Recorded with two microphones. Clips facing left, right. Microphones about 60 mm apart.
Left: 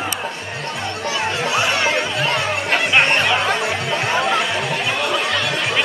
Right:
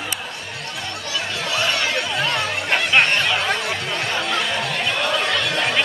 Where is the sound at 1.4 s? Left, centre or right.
Centre.